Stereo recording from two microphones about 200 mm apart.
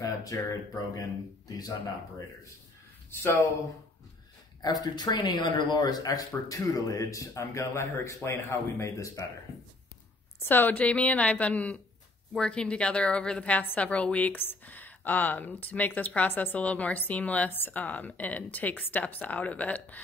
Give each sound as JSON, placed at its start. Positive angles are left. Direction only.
{"t": 0.0, "sound": "a woman's voice", "side_deg": 15}
{"t": 4.6, "sound": "a woman's voice", "side_deg": 20}
{"t": 10.4, "sound": "a woman's voice", "side_deg": 10}